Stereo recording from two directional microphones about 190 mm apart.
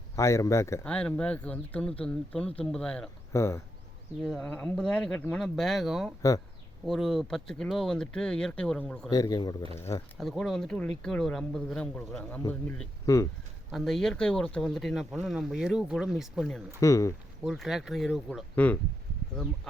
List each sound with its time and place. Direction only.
0.2 s speech: 15° left (ahead or behind)
4.2 s speech: 5° left (ahead or behind)
9.0 s speech: 20° left (ahead or behind)
10.2 s speech: centre (ahead or behind)
16.8 s speech: 15° left (ahead or behind)
17.4 s speech: centre (ahead or behind)